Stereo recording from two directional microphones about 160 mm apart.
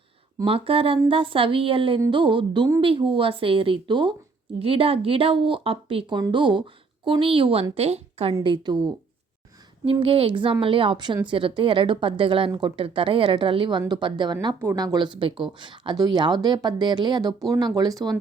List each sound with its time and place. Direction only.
0.4 s a woman's voice: 35° right (ahead or behind)
8.4 s speech: 30° right (ahead or behind)
9.8 s a woman's voice: 35° right (ahead or behind)
14.6 s speech: 15° right (ahead or behind)